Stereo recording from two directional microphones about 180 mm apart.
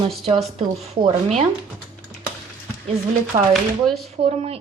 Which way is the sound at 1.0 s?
40° right (ahead or behind).